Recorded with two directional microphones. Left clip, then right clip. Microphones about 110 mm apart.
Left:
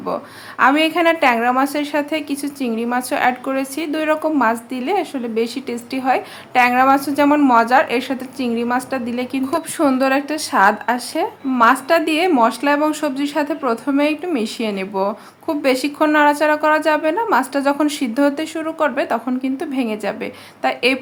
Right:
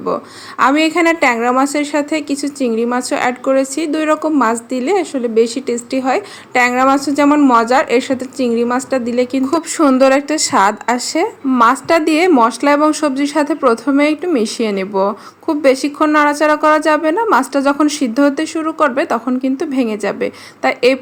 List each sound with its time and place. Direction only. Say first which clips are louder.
0.6 s a woman's voice: right 2 dB; 30° right (ahead or behind)